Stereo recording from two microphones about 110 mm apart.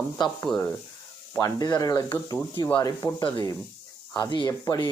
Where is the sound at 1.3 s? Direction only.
35° left (ahead or behind).